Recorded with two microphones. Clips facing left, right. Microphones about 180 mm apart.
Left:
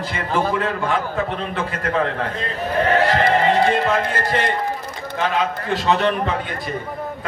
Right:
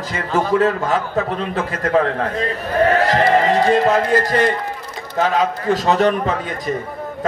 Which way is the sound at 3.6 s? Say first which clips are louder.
Right 3 dB; 40° right (ahead or behind).